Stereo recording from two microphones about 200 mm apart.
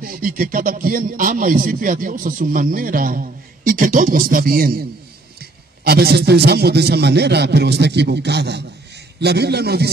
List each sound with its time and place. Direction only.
0.0 s a man's voice: 45° right (ahead or behind)